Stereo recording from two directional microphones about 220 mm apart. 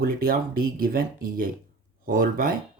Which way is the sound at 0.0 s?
40° right (ahead or behind).